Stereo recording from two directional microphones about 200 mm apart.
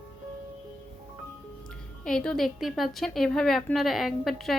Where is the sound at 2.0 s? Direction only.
5° left (ahead or behind).